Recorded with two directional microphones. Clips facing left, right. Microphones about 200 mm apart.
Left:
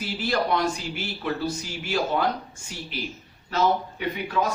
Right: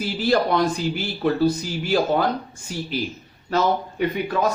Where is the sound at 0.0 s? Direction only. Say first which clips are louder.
Right 6 dB; 35° right (ahead or behind).